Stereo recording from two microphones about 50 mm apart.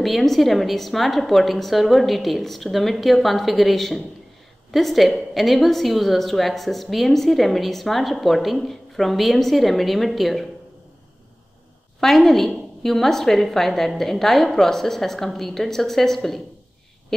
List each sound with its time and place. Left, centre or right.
0.0 s a woman's voice: centre
12.0 s a woman's voice: centre